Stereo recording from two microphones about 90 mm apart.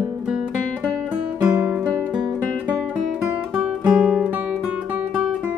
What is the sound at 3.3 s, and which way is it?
Music, 15° right (ahead or behind).